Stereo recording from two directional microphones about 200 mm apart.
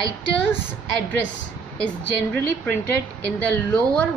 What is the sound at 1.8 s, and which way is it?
Speech, 5° left (ahead or behind).